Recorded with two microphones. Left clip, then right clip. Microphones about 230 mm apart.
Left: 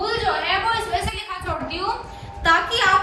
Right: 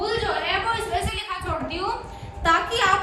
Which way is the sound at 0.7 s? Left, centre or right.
Centre.